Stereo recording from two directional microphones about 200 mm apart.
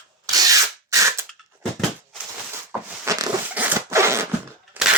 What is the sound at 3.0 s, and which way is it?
Zipper, 15° right (ahead or behind).